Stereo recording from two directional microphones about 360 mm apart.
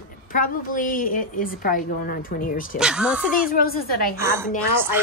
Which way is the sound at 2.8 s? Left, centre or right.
Centre.